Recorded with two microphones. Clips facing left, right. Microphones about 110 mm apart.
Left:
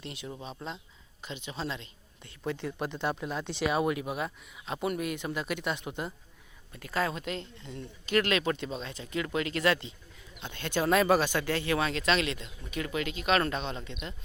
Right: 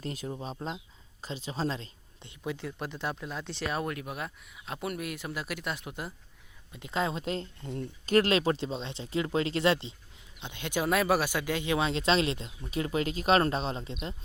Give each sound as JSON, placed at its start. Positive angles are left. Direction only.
{"t": 0.0, "sound": "speech", "side_deg": -40}
{"t": 2.4, "sound": "speech", "side_deg": -5}
{"t": 6.7, "sound": "speech", "side_deg": -20}
{"t": 7.6, "sound": "speech", "side_deg": -45}
{"t": 10.4, "sound": "speech", "side_deg": -15}